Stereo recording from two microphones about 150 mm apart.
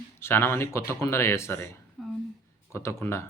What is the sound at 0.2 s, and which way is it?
A man's voice, 15° left (ahead or behind).